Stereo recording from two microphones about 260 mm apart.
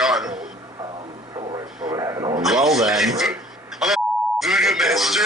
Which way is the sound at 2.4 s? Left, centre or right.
Centre.